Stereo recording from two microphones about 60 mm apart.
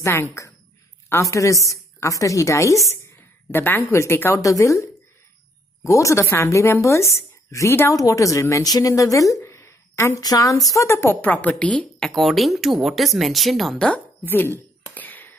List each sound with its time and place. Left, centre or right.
0.0 s a woman's voice: left
1.2 s a woman's voice: left
3.5 s a woman's voice: left
4.4 s a woman's voice: left
5.9 s a woman's voice: left
7.9 s a woman's voice: left
8.6 s speech: left
9.4 s a sound: left
10.1 s speech: left
10.7 s a woman's voice: left
11.2 s a woman's voice: left
12.2 s speech: centre
13.7 s a woman's voice: left
14.2 s a sound: left